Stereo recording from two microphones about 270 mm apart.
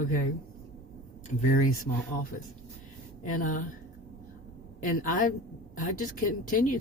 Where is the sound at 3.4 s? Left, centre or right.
Left.